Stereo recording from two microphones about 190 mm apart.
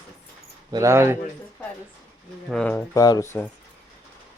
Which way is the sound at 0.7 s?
15° right (ahead or behind).